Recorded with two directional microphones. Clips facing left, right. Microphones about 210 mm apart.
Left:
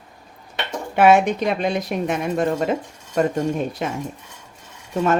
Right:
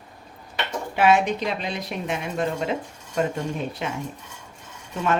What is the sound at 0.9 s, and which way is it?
Speech, 50° left (ahead or behind).